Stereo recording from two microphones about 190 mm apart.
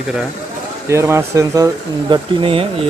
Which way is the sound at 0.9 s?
15° right (ahead or behind).